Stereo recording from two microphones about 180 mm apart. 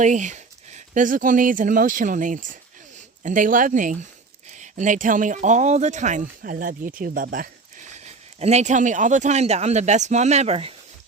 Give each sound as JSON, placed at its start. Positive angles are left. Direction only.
{"t": 0.0, "sound": "speech", "side_deg": -45}